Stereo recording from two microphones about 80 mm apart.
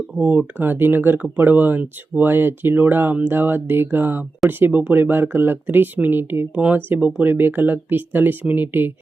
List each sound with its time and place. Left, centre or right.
0.2 s speech: right
6.5 s speech: centre